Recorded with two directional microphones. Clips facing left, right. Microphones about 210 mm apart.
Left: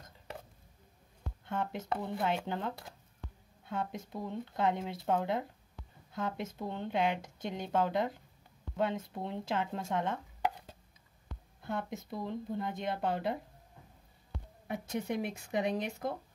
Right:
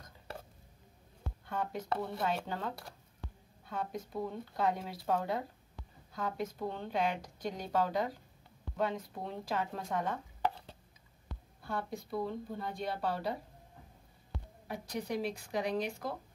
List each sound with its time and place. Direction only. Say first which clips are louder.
1.4 s speech: left 1 dB; 25° left (ahead or behind)
11.6 s speech: left 1 dB; 20° left (ahead or behind)
14.7 s speech: left 2 dB; 25° left (ahead or behind)